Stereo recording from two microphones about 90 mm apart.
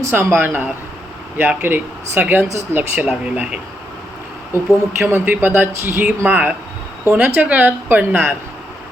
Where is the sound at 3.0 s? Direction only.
10° right (ahead or behind).